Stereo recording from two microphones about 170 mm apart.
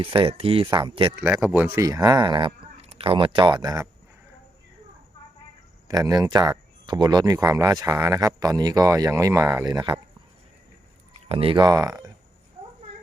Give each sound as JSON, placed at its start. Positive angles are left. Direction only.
{"t": 0.0, "sound": "speech", "side_deg": -30}
{"t": 1.4, "sound": "speech", "side_deg": -5}
{"t": 5.9, "sound": "speech", "side_deg": -20}
{"t": 11.3, "sound": "speech", "side_deg": -35}